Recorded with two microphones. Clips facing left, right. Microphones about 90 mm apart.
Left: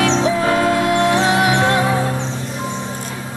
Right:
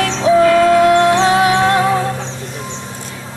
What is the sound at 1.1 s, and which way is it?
Music, 30° right (ahead or behind).